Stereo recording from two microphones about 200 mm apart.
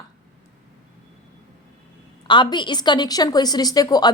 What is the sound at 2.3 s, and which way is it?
A woman's voice, 25° left (ahead or behind).